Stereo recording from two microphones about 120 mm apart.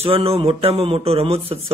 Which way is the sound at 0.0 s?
55° right (ahead or behind).